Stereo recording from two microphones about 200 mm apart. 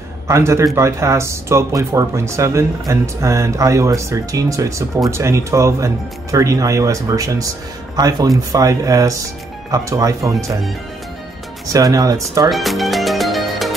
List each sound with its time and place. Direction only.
0.3 s speech: 15° right (ahead or behind)
11.6 s speech: 15° right (ahead or behind)
12.4 s music: centre (ahead or behind)